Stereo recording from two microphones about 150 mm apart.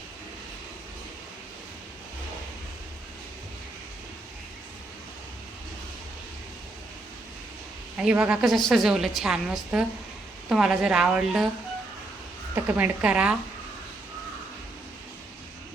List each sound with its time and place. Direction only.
7.9 s a woman's voice: 10° right (ahead or behind)
12.5 s speech: 10° right (ahead or behind)